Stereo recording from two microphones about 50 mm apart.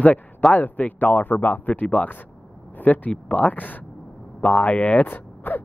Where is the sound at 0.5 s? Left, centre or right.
Left.